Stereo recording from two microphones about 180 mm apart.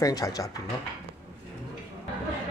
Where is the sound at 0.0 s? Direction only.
20° left (ahead or behind).